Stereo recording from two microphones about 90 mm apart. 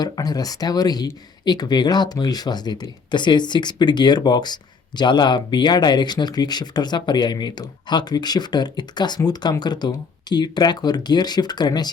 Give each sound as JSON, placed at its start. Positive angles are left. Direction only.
{"t": 0.0, "sound": "speech", "side_deg": 45}